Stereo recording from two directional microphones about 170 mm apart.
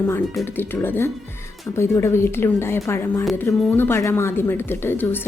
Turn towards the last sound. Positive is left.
turn(degrees=10)  # may be behind; listen again after turning